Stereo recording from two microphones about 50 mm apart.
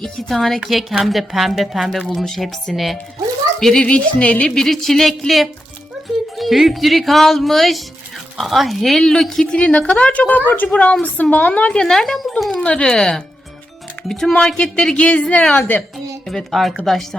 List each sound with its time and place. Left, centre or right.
0.0 s a woman's voice: centre
3.8 s a woman's voice: left
4.5 s a woman's voice: centre
9.6 s a woman's voice: left
10.7 s a woman's voice: left
11.8 s a woman's voice: centre
12.6 s a woman's voice: left
14.9 s a woman's voice: left
16.2 s a woman's voice: centre